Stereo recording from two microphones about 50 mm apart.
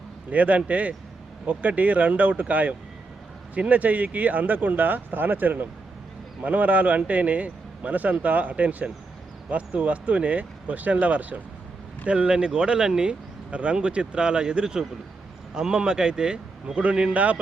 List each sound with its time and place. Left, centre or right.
0.3 s a man's voice: right